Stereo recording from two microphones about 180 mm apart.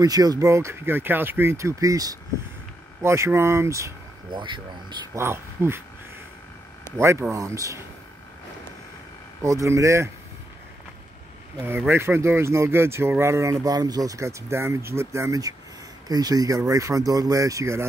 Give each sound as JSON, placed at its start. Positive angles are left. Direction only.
{"t": 0.0, "sound": "speech", "side_deg": -20}
{"t": 5.2, "sound": "speech", "side_deg": -15}
{"t": 7.0, "sound": "speech", "side_deg": -15}
{"t": 9.4, "sound": "speech", "side_deg": -15}
{"t": 11.9, "sound": "speech", "side_deg": -15}